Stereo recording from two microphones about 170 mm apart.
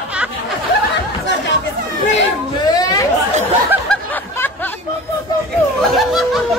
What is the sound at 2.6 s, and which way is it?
Chatter, 25° left (ahead or behind).